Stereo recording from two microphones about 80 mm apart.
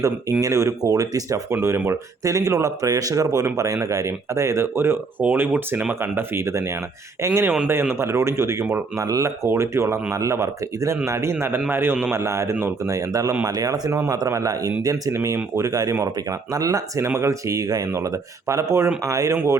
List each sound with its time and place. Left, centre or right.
0.0 s speech: right
5.2 s speech: right
12.2 s speech: right